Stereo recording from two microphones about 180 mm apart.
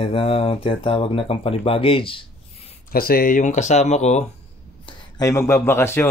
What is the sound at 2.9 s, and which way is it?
Speech, 55° left (ahead or behind).